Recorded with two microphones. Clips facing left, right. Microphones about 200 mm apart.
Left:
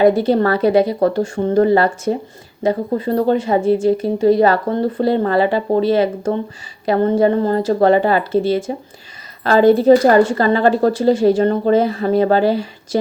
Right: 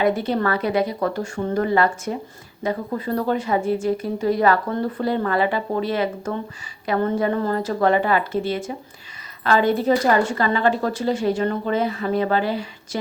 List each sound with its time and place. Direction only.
0.0 s speech: 35° left (ahead or behind)